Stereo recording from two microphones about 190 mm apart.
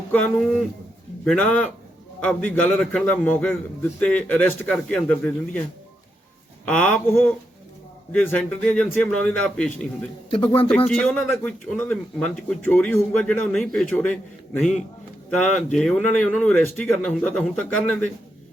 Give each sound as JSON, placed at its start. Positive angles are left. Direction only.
{"t": 0.1, "sound": "a man's voice", "side_deg": 5}
{"t": 6.7, "sound": "a man's voice", "side_deg": 5}
{"t": 10.2, "sound": "speech", "side_deg": 30}
{"t": 10.8, "sound": "a man's voice", "side_deg": 5}